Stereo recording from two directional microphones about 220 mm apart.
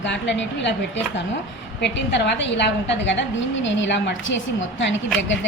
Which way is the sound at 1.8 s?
50° left (ahead or behind).